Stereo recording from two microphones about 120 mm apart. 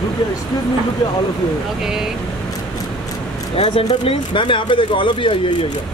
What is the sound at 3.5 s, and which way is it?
Speech, 50° left (ahead or behind).